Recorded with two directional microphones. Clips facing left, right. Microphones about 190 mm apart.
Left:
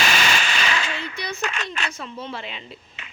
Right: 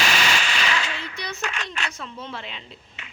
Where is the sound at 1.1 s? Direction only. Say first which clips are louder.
Left 3 dB; centre (ahead or behind).